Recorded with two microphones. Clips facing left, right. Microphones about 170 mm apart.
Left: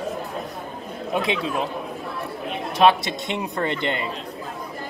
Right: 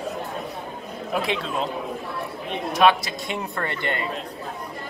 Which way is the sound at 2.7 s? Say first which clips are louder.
Left 1 dB; 25° left (ahead or behind).